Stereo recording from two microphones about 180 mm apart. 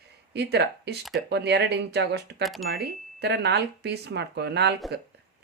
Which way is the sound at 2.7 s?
65° right (ahead or behind).